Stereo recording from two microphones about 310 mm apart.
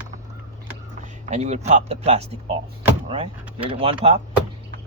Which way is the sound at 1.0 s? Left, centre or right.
Right.